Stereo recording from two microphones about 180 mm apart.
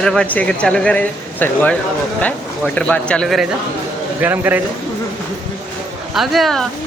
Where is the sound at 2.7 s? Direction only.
5° left (ahead or behind).